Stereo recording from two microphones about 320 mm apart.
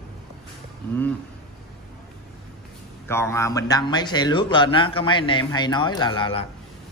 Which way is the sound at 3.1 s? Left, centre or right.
Centre.